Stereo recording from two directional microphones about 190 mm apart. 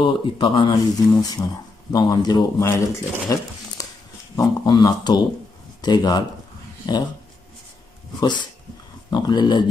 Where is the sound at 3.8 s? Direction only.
20° left (ahead or behind).